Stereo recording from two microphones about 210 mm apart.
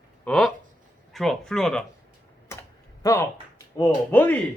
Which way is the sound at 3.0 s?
15° left (ahead or behind).